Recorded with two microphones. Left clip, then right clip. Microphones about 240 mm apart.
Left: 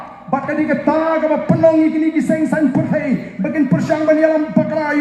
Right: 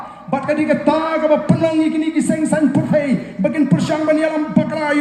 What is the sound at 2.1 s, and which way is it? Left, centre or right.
Speech, right.